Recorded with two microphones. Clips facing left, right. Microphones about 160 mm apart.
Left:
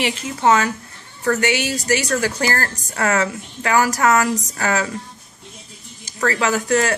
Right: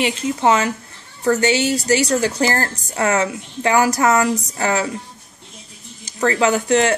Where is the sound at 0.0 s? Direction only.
25° right (ahead or behind).